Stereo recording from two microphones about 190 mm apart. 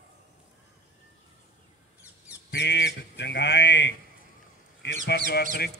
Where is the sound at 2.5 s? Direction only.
65° left (ahead or behind).